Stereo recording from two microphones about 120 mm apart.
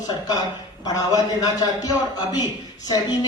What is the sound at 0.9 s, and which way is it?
Speech, 30° left (ahead or behind).